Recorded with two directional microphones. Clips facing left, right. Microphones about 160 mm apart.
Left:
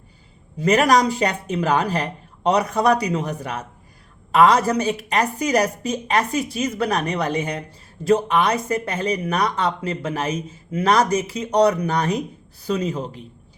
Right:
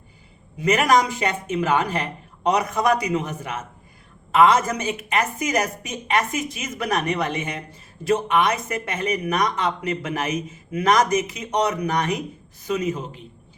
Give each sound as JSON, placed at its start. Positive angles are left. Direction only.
{"t": 0.6, "sound": "speech", "side_deg": 35}